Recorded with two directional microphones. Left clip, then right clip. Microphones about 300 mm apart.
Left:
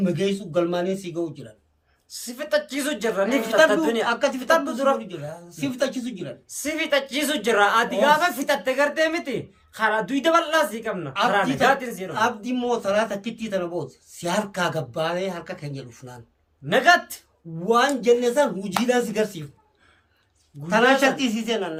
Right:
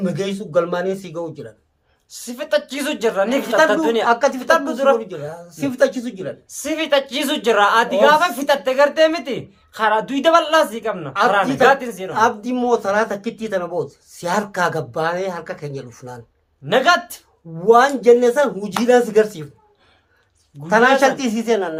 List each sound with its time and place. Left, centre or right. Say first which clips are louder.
0.0 s a woman's voice: right 1 dB; centre
4.4 s a woman's voice: right 4 dB; centre
12.1 s a woman's voice: right 7 dB; centre
17.7 s speech: right 7 dB; centre
20.7 s speech: right 5 dB; centre